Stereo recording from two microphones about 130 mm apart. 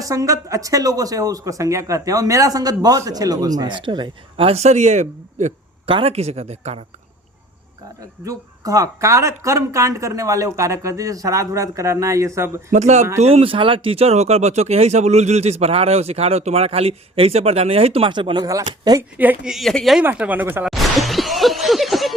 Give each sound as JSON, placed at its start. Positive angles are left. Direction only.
{"t": 0.0, "sound": "speech", "side_deg": -25}
{"t": 5.8, "sound": "speech", "side_deg": -45}
{"t": 8.2, "sound": "speech", "side_deg": -25}
{"t": 12.7, "sound": "speech", "side_deg": -60}
{"t": 13.2, "sound": "speech", "side_deg": -45}
{"t": 19.1, "sound": "speech", "side_deg": -10}
{"t": 19.5, "sound": "speech", "side_deg": 0}
{"t": 20.1, "sound": "speech", "side_deg": -10}
{"t": 20.7, "sound": "speech", "side_deg": 0}